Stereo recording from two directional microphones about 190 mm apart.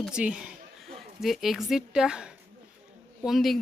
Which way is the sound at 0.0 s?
5° right (ahead or behind).